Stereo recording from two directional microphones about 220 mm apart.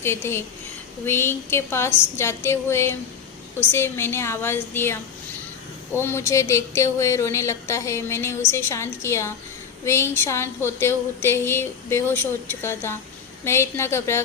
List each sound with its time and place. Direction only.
0.2 s speech: 10° left (ahead or behind)